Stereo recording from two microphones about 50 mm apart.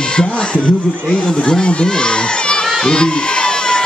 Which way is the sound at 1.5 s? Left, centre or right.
Centre.